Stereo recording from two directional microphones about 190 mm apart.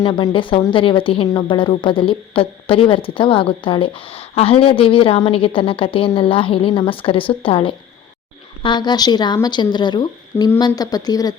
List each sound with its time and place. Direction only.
0.0 s a woman's voice: 25° left (ahead or behind)